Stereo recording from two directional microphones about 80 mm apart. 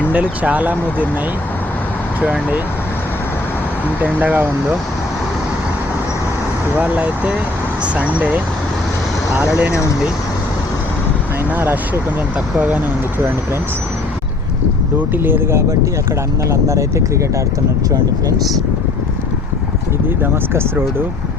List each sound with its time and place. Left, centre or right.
0.1 s speech: centre
2.2 s speech: centre
4.0 s speech: centre
6.7 s speech: centre
9.3 s speech: centre
11.5 s speech: right
15.1 s speech: right
16.5 s speech: right
20.2 s speech: right